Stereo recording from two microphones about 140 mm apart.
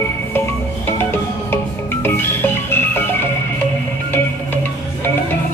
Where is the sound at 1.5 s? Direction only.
15° left (ahead or behind).